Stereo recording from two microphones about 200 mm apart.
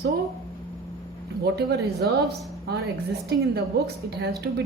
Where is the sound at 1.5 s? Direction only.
55° right (ahead or behind).